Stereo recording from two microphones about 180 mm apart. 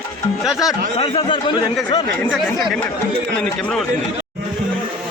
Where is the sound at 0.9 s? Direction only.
30° left (ahead or behind).